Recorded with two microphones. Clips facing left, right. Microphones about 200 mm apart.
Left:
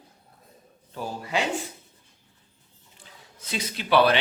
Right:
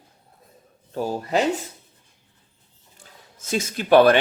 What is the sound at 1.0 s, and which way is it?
Speech, 45° right (ahead or behind).